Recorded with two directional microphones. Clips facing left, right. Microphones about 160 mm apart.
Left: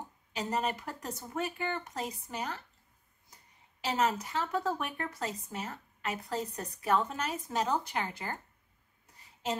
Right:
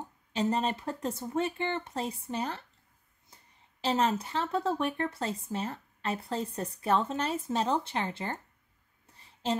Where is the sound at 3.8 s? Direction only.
30° right (ahead or behind).